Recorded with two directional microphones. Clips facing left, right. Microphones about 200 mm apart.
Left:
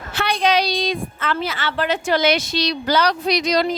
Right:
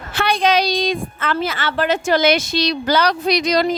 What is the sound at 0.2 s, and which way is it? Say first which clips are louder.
A woman's voice: right 2 dB; 50° right (ahead or behind).